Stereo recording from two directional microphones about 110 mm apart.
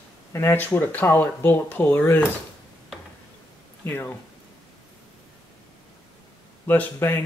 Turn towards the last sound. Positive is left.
turn(degrees=20)  # may be behind; listen again after turning